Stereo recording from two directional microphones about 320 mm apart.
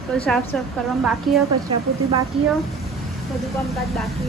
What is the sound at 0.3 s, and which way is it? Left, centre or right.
A woman's voice, centre.